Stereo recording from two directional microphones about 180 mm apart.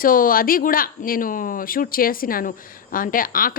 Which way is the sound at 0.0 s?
50° left (ahead or behind).